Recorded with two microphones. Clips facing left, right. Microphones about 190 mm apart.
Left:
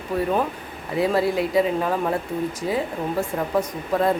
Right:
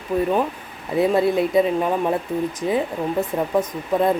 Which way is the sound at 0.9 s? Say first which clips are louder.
Right 3 dB; 25° right (ahead or behind).